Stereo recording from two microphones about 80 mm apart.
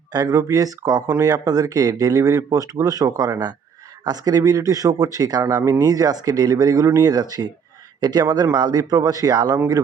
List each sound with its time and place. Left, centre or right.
0.1 s a man's voice: right